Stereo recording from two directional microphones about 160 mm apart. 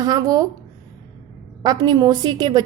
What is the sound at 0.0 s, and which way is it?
Speech, 25° right (ahead or behind).